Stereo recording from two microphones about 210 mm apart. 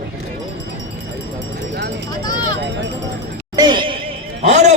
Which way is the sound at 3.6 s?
20° right (ahead or behind).